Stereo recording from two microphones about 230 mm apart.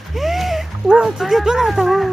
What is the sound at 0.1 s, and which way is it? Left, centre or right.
Speech, centre.